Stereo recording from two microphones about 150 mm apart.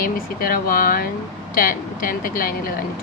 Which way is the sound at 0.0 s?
70° left (ahead or behind).